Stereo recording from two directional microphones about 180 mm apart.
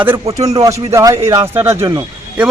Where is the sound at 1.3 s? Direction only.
30° right (ahead or behind).